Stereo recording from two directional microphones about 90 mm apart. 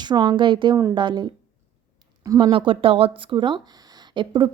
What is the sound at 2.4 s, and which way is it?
Speech, 75° right (ahead or behind).